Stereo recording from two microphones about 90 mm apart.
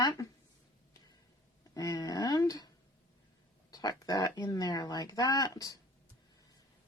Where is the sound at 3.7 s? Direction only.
45° left (ahead or behind).